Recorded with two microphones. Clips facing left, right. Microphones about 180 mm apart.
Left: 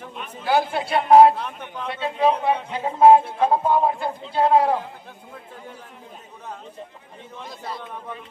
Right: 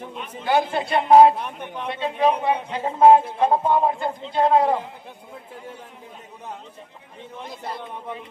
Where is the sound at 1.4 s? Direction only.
15° right (ahead or behind).